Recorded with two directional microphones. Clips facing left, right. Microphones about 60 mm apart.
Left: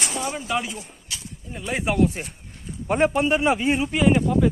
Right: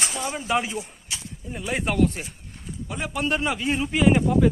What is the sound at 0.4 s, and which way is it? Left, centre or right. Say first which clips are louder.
Speech: right 2 dB; right.